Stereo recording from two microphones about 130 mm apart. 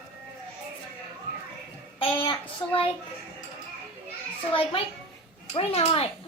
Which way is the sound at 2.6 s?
35° left (ahead or behind).